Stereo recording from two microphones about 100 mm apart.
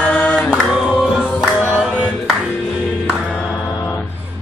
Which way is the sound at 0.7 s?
5° right (ahead or behind).